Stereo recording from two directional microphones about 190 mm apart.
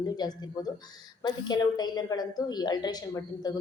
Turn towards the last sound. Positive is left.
turn(degrees=20)  # may be behind; listen again after turning